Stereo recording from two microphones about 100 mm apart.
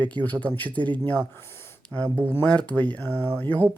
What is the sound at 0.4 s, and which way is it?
Mantra, 15° left (ahead or behind).